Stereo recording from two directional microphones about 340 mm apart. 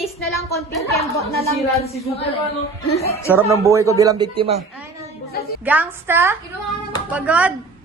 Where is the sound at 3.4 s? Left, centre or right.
Centre.